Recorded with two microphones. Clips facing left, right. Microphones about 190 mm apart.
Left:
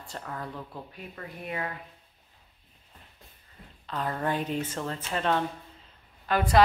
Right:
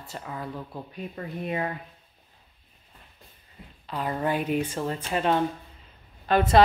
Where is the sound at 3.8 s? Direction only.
10° right (ahead or behind).